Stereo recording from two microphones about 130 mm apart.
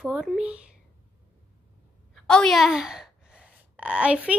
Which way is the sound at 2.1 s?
5° left (ahead or behind).